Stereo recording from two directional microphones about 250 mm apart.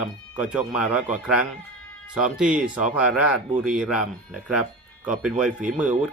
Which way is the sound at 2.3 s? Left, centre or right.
Centre.